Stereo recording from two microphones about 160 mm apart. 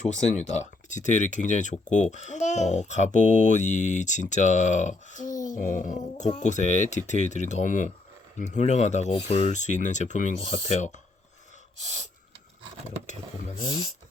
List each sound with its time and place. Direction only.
0.0 s speech: 45° left (ahead or behind)